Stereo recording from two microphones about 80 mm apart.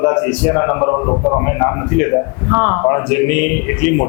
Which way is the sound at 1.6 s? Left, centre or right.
Left.